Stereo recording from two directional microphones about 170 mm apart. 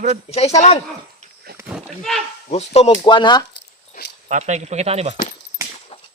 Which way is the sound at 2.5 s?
40° left (ahead or behind).